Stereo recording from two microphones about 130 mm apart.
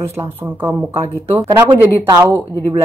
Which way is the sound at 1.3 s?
20° right (ahead or behind).